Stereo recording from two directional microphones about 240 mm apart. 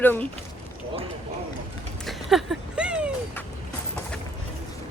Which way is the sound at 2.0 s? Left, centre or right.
Centre.